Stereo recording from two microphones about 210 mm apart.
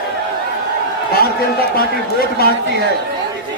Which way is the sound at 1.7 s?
45° left (ahead or behind).